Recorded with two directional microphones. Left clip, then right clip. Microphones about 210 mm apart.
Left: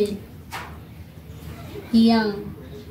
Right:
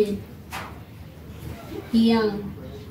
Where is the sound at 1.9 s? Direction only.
40° left (ahead or behind).